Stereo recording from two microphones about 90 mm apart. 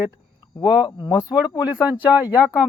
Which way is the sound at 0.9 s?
40° left (ahead or behind).